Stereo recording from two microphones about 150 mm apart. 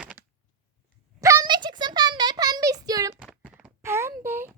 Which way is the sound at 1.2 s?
20° right (ahead or behind).